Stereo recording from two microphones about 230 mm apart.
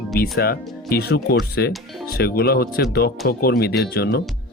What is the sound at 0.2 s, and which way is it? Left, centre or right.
Speech, left.